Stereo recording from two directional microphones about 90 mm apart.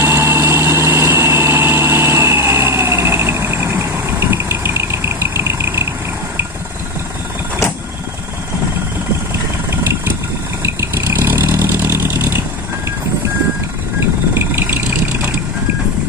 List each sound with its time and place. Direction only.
0.0 s vehicle: 30° right (ahead or behind)
10.6 s vehicle: 30° right (ahead or behind)
13.9 s vehicle: 30° right (ahead or behind)